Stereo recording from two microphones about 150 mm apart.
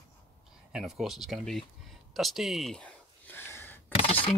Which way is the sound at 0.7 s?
5° right (ahead or behind).